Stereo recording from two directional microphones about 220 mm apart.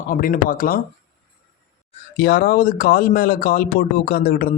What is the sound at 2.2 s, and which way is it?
Speech, 45° left (ahead or behind).